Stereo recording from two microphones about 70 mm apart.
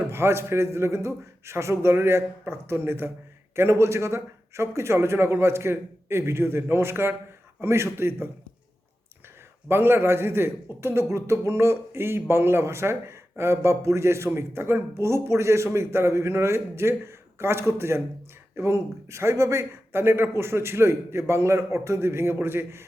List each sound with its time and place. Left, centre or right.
0.1 s a man's voice: right
9.6 s a man's voice: right